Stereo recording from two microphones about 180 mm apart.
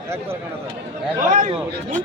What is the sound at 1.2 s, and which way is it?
Speech, 45° right (ahead or behind).